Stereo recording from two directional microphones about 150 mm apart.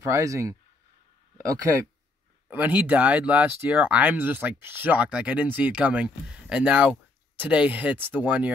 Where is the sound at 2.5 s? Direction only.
10° right (ahead or behind).